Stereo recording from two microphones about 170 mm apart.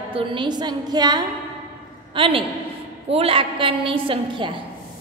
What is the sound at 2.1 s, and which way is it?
Speech, 30° right (ahead or behind).